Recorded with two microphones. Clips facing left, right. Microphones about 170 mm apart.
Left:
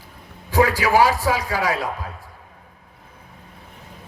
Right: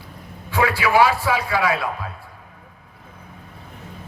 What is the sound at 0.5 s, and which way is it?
A man's voice, 40° left (ahead or behind).